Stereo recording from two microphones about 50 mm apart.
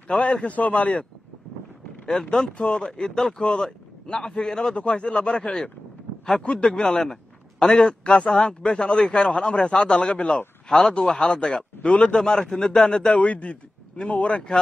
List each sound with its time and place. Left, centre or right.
0.1 s a man's voice: centre
2.3 s a man's voice: left